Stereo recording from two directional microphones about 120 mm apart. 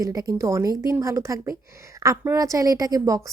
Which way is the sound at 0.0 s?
30° right (ahead or behind).